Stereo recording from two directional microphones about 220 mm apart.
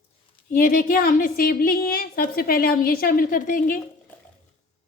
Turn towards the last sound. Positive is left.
turn(degrees=40)  # may be behind; listen again after turning